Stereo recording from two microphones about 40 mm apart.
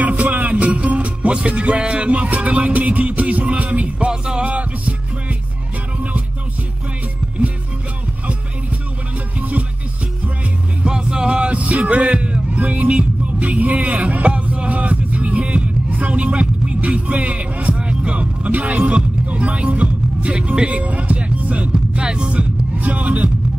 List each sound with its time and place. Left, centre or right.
0.1 s music: right
4.1 s music: centre
4.5 s music: right
9.4 s music: right
10.8 s music: right
11.5 s music: right
21.7 s music: right
22.8 s a sound: right